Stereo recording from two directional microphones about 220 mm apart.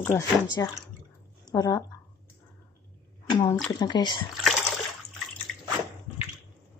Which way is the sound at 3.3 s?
15° left (ahead or behind).